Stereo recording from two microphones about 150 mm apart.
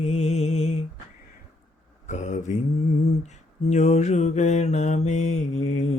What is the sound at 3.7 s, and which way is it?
Mantra, 50° left (ahead or behind).